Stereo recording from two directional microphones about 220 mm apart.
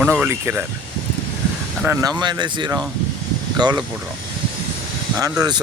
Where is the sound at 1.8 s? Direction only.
15° right (ahead or behind).